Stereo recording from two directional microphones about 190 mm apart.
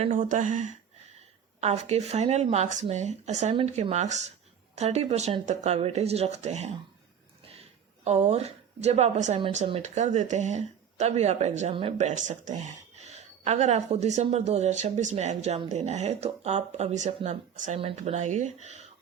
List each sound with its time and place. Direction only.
0.2 s a woman's voice: 40° right (ahead or behind)
8.0 s a woman's voice: 35° right (ahead or behind)